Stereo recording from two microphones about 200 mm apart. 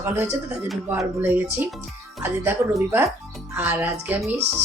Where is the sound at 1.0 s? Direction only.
10° right (ahead or behind).